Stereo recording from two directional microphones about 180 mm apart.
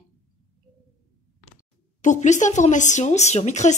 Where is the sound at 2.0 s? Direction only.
40° left (ahead or behind).